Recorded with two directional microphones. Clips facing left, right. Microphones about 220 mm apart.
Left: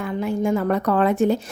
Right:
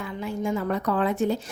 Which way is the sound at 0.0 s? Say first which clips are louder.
Left 6 dB; 60° left (ahead or behind).